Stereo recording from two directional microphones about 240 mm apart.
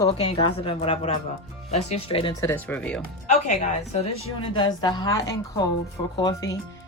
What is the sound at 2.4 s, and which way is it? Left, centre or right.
Speech, centre.